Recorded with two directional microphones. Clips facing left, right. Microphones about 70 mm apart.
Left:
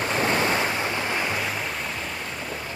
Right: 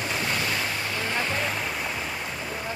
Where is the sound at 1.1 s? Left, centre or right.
Centre.